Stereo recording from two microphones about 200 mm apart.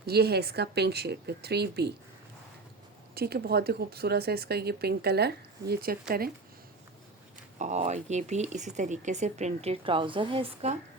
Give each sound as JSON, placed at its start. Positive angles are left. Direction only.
{"t": 0.0, "sound": "speech", "side_deg": -50}
{"t": 3.2, "sound": "speech", "side_deg": -50}
{"t": 7.6, "sound": "speech", "side_deg": -35}